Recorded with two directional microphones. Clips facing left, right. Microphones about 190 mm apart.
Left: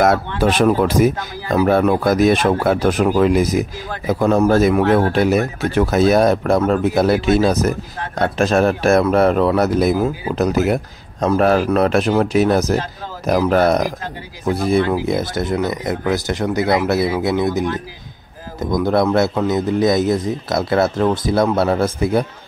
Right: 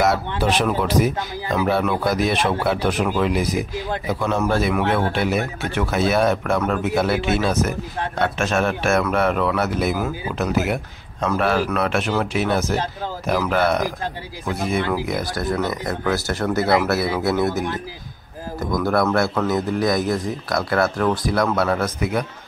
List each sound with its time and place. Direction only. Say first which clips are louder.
0.4 s a man's voice: left 7 dB; 45° left (ahead or behind); by 22.2 s 30° left (ahead or behind)